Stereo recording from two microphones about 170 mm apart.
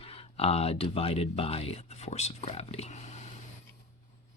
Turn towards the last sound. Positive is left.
turn(degrees=45)  # may be behind; listen again after turning